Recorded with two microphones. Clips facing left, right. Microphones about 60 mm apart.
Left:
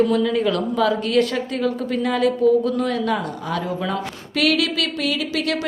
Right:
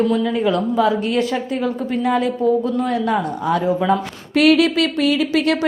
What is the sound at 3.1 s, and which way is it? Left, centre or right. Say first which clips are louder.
A woman's voice: right 5 dB; right.